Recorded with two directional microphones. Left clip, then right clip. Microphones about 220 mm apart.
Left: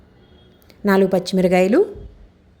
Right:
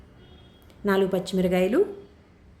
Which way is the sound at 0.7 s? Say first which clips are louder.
Left 7 dB; 30° left (ahead or behind).